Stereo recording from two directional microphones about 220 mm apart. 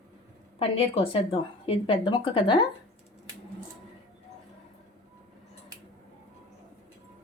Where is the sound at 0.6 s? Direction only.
25° left (ahead or behind).